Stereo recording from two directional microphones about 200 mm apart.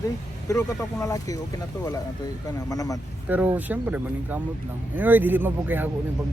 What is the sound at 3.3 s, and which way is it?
Speech, 10° right (ahead or behind).